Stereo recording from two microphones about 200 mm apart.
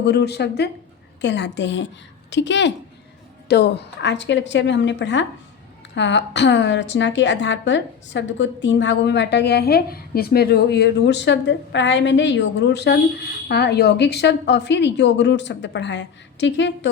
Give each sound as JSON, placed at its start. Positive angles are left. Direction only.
{"t": 0.0, "sound": "a woman's voice", "side_deg": 55}